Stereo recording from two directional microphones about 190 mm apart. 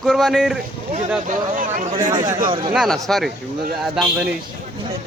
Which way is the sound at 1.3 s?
45° right (ahead or behind).